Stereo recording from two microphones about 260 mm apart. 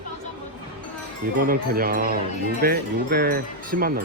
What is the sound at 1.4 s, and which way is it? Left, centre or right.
Speech, right.